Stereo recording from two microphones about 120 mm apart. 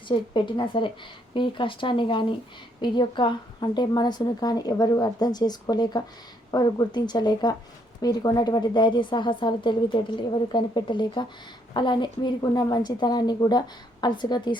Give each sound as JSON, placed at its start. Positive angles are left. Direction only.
{"t": 0.1, "sound": "a woman's voice", "side_deg": 40}